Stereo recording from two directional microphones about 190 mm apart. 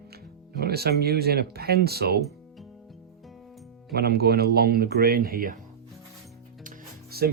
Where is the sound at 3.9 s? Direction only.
55° right (ahead or behind).